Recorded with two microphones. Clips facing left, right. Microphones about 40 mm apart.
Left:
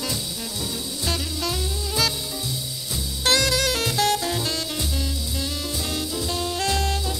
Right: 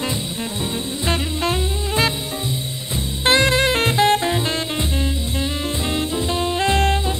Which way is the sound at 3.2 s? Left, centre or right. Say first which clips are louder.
Right 5 dB; right.